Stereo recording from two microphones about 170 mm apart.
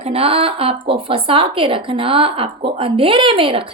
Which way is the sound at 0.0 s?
35° right (ahead or behind).